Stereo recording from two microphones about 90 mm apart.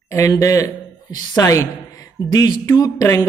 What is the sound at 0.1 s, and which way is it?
A woman's voice, 35° left (ahead or behind).